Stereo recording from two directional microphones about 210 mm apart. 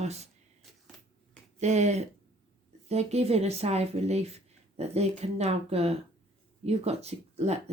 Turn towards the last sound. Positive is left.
turn(degrees=-30)  # may be behind; listen again after turning